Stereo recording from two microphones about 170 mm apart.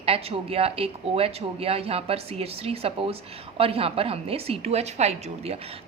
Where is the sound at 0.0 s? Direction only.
35° right (ahead or behind).